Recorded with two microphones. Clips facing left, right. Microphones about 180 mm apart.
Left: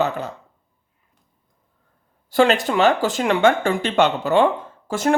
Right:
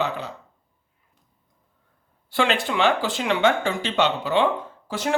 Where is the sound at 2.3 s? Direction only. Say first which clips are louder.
Left 6 dB; 40° left (ahead or behind).